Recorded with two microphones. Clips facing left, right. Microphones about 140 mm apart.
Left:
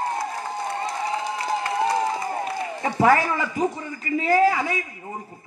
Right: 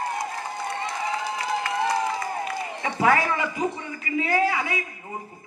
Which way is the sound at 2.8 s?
35° left (ahead or behind).